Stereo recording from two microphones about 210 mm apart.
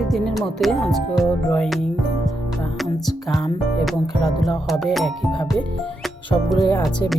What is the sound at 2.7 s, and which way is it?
Music, centre (ahead or behind).